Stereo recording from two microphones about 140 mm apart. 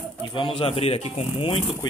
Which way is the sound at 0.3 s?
35° left (ahead or behind).